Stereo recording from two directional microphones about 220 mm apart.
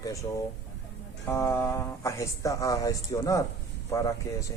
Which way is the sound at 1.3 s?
10° left (ahead or behind).